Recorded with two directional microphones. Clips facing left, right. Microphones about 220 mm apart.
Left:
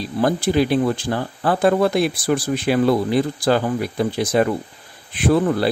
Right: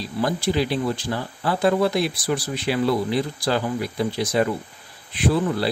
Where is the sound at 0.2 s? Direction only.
50° left (ahead or behind).